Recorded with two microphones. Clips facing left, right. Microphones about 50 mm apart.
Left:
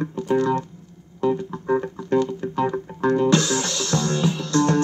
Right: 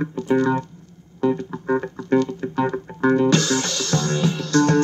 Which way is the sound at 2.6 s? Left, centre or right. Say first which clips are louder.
Right 2 dB; right.